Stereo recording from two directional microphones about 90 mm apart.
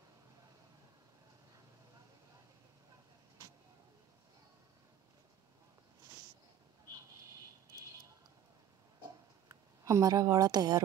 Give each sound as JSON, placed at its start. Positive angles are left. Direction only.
{"t": 9.5, "sound": "speech", "side_deg": -40}